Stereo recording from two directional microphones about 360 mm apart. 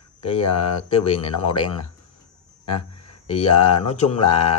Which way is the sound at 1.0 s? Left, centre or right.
Centre.